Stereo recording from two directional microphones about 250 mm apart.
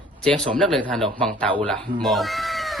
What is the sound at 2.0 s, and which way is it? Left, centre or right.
Cat, centre.